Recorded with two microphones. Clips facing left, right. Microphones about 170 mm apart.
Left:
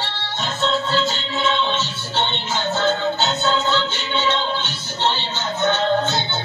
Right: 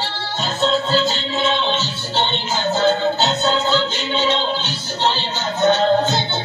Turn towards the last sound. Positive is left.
turn(degrees=-35)  # may be behind; listen again after turning